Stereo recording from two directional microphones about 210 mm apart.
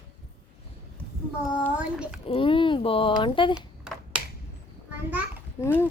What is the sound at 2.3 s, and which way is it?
Speech, 25° left (ahead or behind).